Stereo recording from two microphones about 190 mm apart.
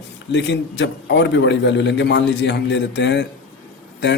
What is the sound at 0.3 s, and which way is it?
A man's voice, 70° left (ahead or behind).